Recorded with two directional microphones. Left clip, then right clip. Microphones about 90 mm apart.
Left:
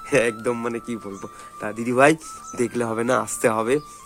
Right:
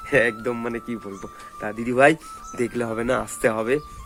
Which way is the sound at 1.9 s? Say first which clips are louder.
Even; 30° left (ahead or behind).